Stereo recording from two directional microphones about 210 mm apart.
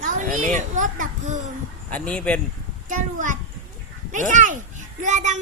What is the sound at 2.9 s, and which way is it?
A child's voice, 40° right (ahead or behind).